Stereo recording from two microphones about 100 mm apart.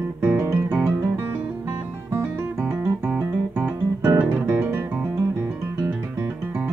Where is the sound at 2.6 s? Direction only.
20° right (ahead or behind).